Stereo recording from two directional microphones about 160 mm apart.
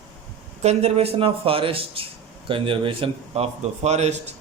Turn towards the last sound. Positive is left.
turn(degrees=-45)  # may be behind; listen again after turning